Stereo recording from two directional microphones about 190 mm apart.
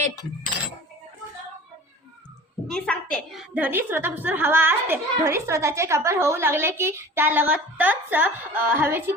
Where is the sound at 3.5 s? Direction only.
10° right (ahead or behind).